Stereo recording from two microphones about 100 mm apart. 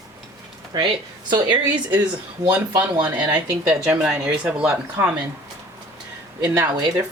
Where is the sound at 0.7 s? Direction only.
45° right (ahead or behind).